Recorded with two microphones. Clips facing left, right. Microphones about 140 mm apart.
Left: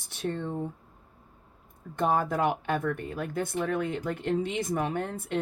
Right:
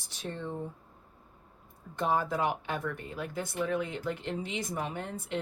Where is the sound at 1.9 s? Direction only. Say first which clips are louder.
Left 3 dB; 50° left (ahead or behind).